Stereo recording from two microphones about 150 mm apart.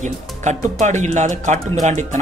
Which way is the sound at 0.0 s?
50° right (ahead or behind).